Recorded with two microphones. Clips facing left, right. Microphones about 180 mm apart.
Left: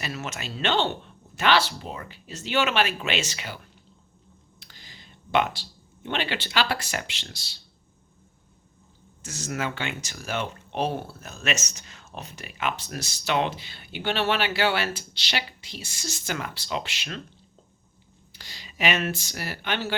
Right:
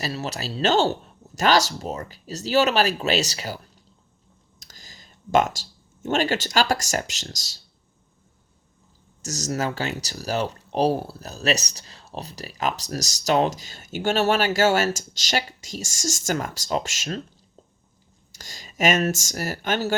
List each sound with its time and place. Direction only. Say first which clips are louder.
0.0 s speech: right 4 dB; 35° right (ahead or behind)
9.2 s speech: right 4 dB; 40° right (ahead or behind)
18.3 s speech: right 3 dB; 45° right (ahead or behind)